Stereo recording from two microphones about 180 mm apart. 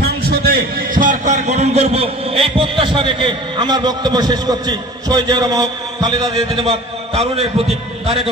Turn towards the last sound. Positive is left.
turn(degrees=-35)  # may be behind; listen again after turning